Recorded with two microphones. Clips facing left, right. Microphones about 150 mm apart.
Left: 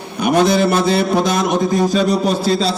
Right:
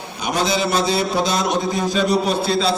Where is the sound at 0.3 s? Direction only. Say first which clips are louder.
Left 7 dB; 55° left (ahead or behind).